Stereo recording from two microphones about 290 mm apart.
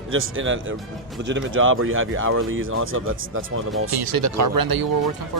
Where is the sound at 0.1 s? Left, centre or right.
Right.